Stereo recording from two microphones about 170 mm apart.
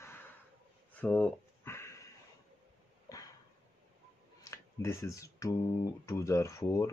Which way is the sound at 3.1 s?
20° left (ahead or behind).